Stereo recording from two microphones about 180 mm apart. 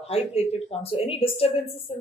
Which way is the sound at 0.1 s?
35° left (ahead or behind).